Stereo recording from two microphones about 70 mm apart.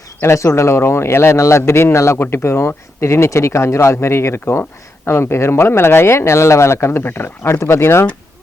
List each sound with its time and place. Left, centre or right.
0.2 s speech: left